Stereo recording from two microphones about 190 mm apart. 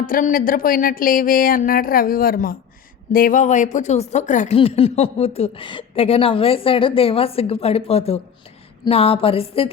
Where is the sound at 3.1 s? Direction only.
45° left (ahead or behind).